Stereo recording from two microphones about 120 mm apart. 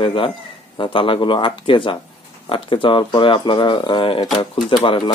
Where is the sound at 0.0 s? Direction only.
45° left (ahead or behind).